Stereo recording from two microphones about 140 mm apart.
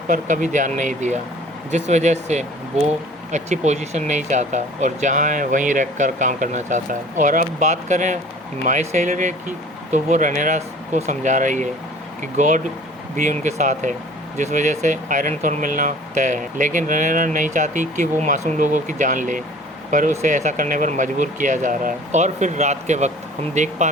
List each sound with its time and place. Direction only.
0.1 s speech: 65° right (ahead or behind)